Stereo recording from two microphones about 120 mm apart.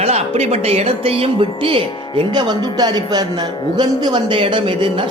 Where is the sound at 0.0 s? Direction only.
60° right (ahead or behind).